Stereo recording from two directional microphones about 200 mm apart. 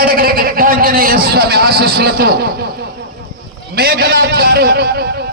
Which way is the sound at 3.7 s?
50° right (ahead or behind).